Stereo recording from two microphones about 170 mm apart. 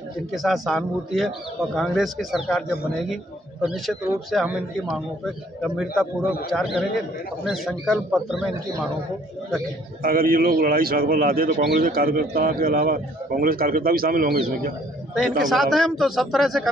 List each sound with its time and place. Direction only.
0.3 s a man's voice: centre (ahead or behind)
3.6 s a man's voice: centre (ahead or behind)
10.0 s a man's voice: 60° right (ahead or behind)
15.1 s a man's voice: centre (ahead or behind)